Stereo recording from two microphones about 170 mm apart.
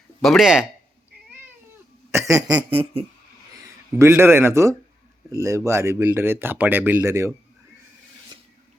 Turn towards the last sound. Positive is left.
turn(degrees=-15)  # may be behind; listen again after turning